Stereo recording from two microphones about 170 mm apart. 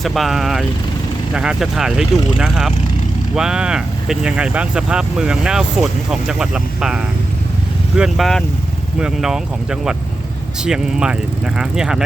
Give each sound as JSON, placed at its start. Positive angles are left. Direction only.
{"t": 0.0, "sound": "speech", "side_deg": 0}